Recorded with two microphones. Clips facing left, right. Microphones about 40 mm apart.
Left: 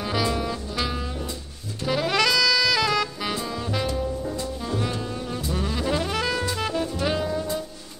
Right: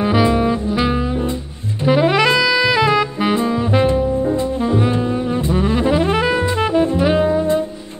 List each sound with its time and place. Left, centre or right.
0.0 s music: right
1.9 s saxophone: right
6.0 s music: right